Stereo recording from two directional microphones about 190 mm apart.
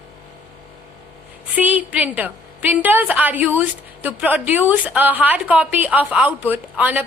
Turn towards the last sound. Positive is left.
turn(degrees=-10)  # may be behind; listen again after turning